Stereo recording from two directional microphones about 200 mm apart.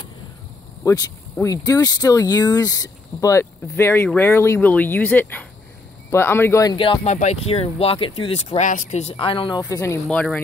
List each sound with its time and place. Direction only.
0.8 s speech: 20° left (ahead or behind)
10.0 s speech: 5° left (ahead or behind)